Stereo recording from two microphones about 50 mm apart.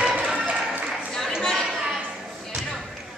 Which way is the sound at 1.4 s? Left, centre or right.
Centre.